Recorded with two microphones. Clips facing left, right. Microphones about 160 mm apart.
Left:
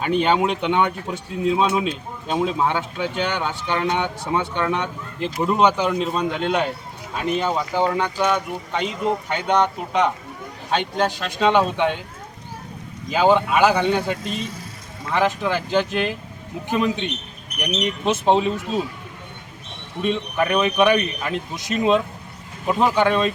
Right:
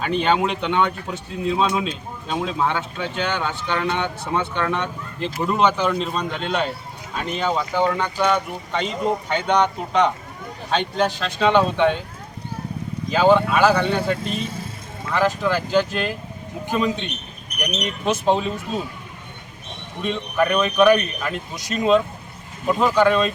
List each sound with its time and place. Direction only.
0.0 s speech: 10° left (ahead or behind)
10.7 s speech: 10° left (ahead or behind)
13.1 s speech: 15° left (ahead or behind)
20.0 s speech: 15° left (ahead or behind)